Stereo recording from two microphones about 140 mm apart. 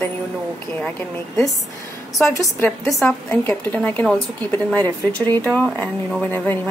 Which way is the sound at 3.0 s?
15° left (ahead or behind).